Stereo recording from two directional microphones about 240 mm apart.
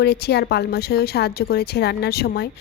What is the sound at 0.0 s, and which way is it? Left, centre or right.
A woman's voice, left.